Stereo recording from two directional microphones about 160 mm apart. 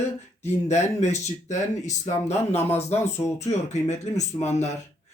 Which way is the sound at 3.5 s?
45° left (ahead or behind).